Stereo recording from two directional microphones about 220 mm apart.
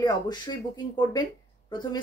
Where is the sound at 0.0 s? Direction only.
20° left (ahead or behind).